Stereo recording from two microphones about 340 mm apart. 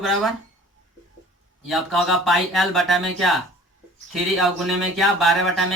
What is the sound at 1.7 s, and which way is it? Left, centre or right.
Speech, centre.